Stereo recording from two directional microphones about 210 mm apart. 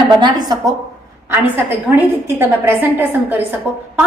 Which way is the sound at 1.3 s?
10° right (ahead or behind).